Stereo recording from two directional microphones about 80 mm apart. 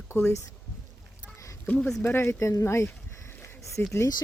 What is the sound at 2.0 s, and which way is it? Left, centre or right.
Speech, left.